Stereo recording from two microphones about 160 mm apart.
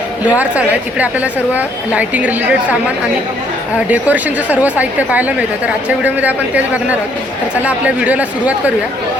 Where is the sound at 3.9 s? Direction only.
10° right (ahead or behind).